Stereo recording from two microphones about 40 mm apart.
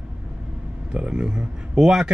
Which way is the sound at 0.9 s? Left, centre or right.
Right.